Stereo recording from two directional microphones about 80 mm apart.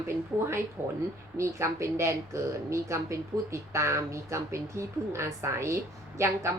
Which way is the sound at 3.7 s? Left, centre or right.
Right.